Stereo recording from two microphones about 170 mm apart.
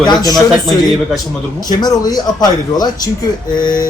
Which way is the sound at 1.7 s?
25° left (ahead or behind).